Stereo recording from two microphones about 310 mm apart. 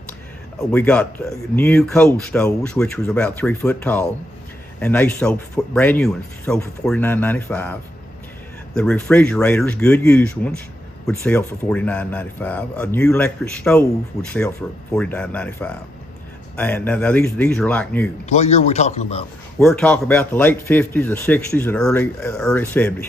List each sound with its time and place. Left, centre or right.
0.6 s speech: centre
18.3 s a man's voice: left
19.5 s speech: centre